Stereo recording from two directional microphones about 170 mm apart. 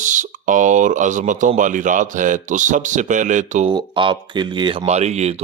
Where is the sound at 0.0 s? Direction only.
50° right (ahead or behind).